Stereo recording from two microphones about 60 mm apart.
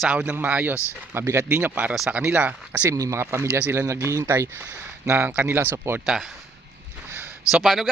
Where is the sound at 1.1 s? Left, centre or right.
Right.